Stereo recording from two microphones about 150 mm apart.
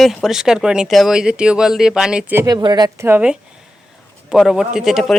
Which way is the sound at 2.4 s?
25° right (ahead or behind).